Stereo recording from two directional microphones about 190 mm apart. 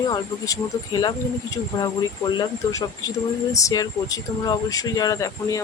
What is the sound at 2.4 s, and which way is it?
Speech, 20° left (ahead or behind).